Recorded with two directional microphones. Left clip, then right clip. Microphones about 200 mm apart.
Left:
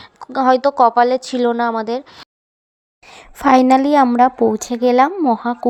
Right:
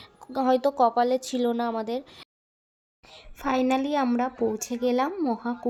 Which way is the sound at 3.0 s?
30° left (ahead or behind).